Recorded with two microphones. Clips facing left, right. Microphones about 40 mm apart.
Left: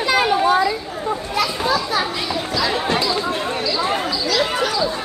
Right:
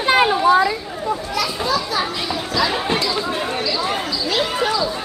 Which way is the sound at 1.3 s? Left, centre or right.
Left.